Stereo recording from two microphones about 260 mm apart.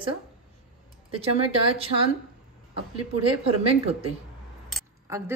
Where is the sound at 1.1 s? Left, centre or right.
Right.